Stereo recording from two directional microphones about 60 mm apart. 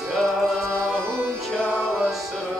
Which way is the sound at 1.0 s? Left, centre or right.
Right.